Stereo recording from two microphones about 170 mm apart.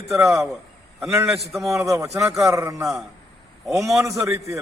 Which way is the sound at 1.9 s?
15° right (ahead or behind).